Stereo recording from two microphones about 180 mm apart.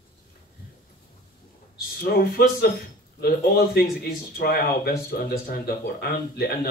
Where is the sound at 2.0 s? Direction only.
55° left (ahead or behind).